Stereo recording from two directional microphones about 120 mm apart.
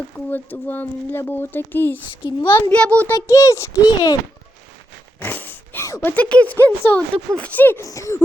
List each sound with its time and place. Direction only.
0.3 s speech: 15° left (ahead or behind)
2.2 s a child's voice: 45° left (ahead or behind)
2.6 s speech: 15° left (ahead or behind)
3.1 s a child's voice: 25° left (ahead or behind)
5.2 s a child's voice: 15° left (ahead or behind)